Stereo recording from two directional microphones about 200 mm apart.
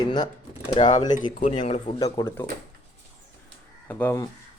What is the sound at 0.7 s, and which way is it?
Speech, 30° left (ahead or behind).